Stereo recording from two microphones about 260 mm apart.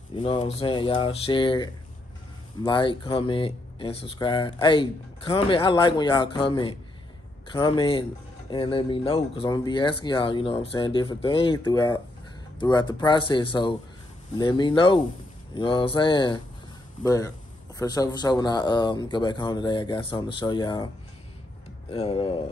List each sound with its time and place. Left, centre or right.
0.1 s speech: centre
21.9 s speech: left